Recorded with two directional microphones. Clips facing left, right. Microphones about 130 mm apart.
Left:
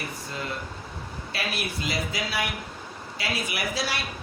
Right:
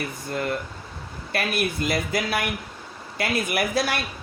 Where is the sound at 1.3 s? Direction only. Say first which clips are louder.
Right 7 dB; 55° right (ahead or behind).